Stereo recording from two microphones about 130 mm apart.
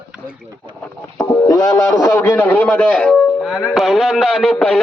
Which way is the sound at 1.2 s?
25° left (ahead or behind).